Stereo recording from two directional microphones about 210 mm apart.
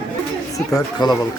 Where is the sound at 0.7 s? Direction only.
20° left (ahead or behind).